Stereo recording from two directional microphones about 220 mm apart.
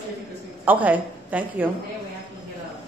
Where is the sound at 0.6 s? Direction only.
5° right (ahead or behind).